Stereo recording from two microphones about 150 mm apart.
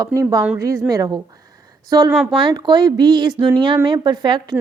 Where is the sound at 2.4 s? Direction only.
30° right (ahead or behind).